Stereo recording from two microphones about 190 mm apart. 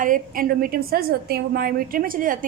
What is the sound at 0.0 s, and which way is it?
A woman's voice, 45° right (ahead or behind).